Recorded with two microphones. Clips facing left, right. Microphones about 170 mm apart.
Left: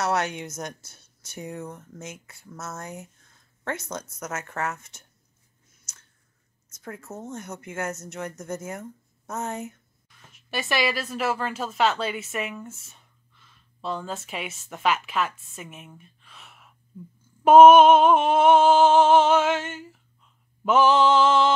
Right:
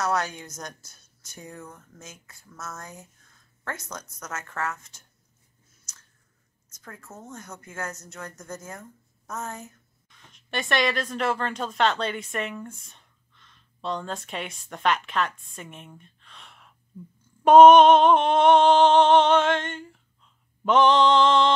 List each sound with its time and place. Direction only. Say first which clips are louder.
0.0 s speech: left 1 dB; 20° left (ahead or behind)
6.7 s speech: left 6 dB; 20° left (ahead or behind)
10.0 s a woman's voice: left 1 dB; 5° left (ahead or behind)
17.5 s a sound: even; 5° left (ahead or behind)
20.6 s mantra: even; 5° left (ahead or behind)